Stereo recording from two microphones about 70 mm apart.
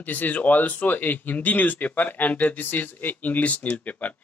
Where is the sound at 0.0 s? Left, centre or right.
Left.